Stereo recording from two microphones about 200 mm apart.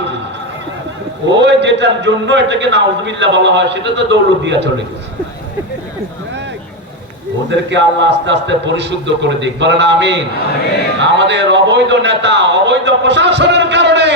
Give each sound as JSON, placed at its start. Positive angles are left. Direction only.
{"t": 1.3, "sound": "a man's voice", "side_deg": -60}
{"t": 7.5, "sound": "a man's voice", "side_deg": -65}